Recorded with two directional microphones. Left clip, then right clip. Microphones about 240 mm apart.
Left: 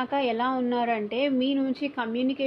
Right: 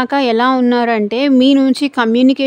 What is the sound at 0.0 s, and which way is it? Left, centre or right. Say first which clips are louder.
Speech: right 13 dB; right.